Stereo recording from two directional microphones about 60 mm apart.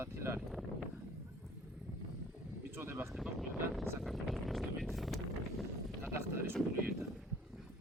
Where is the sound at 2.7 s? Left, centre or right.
Right.